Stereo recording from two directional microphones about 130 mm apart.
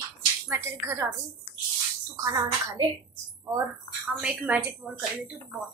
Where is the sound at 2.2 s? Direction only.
30° right (ahead or behind).